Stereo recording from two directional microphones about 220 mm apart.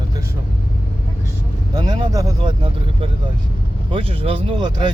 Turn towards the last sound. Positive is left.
turn(degrees=-20)  # may be behind; listen again after turning